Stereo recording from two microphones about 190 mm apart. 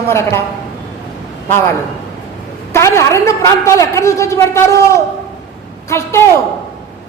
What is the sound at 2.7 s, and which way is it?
A woman's voice, 15° left (ahead or behind).